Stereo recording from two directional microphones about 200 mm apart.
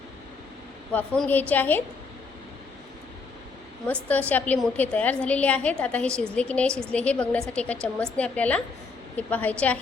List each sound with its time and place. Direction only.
0.9 s a woman's voice: 5° left (ahead or behind)
4.1 s a woman's voice: 5° left (ahead or behind)